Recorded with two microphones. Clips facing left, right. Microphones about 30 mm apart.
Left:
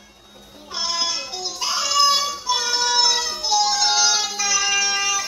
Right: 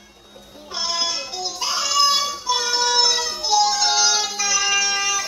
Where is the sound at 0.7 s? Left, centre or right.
Centre.